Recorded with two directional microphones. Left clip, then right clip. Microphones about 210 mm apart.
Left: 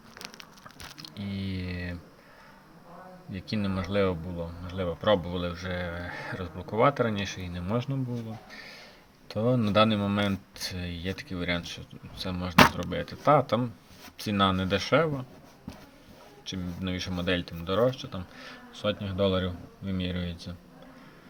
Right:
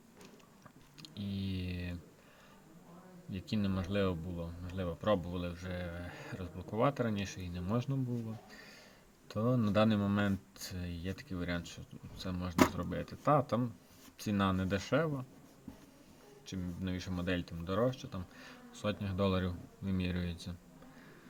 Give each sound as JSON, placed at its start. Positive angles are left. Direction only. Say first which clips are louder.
{"t": 0.9, "sound": "a sound", "louder": "left 4 dB", "side_deg": -15}
{"t": 3.5, "sound": "speech", "louder": "left 7 dB", "side_deg": -20}
{"t": 9.3, "sound": "speech", "louder": "left 8 dB", "side_deg": -15}
{"t": 16.5, "sound": "speech", "louder": "left 8 dB", "side_deg": -20}